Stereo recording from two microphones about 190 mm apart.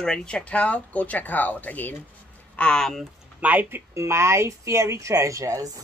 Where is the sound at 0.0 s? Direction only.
5° left (ahead or behind).